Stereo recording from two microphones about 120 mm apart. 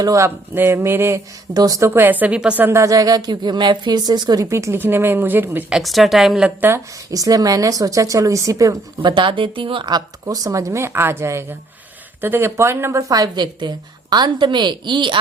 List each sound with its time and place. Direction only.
0.0 s a woman's voice: 25° right (ahead or behind)
5.7 s a woman's voice: centre (ahead or behind)
6.6 s a woman's voice: 20° right (ahead or behind)
9.0 s a woman's voice: 40° right (ahead or behind)